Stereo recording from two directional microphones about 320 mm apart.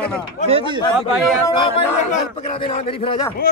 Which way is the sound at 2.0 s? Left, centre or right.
Left.